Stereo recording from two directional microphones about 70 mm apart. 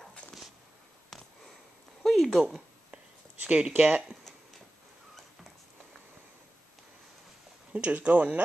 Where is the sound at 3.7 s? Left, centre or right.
Right.